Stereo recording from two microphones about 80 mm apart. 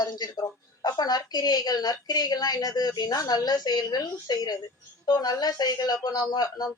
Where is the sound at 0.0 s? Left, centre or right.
Left.